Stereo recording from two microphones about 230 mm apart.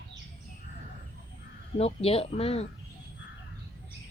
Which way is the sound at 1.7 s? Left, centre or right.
Left.